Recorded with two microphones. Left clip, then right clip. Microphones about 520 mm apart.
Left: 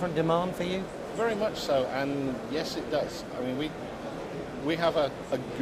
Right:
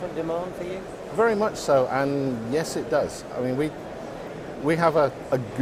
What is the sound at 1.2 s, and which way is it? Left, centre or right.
A man's voice, right.